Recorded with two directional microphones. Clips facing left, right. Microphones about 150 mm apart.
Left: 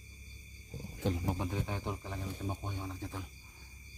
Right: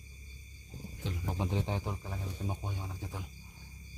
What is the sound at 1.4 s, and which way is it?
Speech, 20° right (ahead or behind).